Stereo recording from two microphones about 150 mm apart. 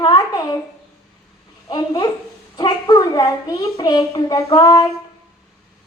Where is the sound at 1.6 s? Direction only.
30° left (ahead or behind).